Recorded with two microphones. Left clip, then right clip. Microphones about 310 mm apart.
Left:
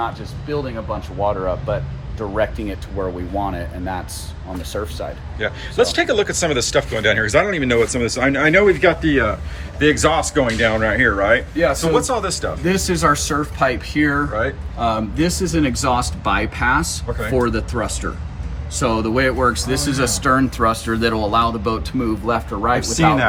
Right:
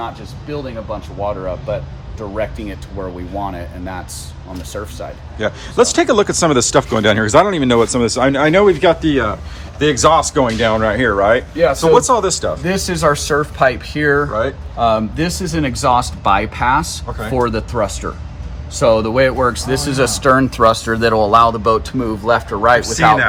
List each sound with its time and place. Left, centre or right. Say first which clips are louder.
0.5 s speech: even; centre
5.7 s speech: right 4 dB; right
11.5 s speech: right 4 dB; right
11.8 s speech: right 7 dB; centre
12.6 s speech: even; right